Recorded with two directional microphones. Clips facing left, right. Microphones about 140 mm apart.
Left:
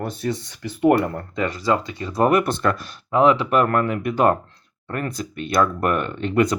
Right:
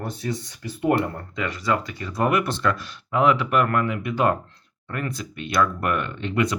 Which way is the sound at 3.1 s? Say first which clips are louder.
Left 3 dB; 30° left (ahead or behind).